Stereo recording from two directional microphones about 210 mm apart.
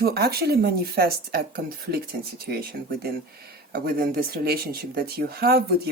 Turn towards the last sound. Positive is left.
turn(degrees=-45)  # may be behind; listen again after turning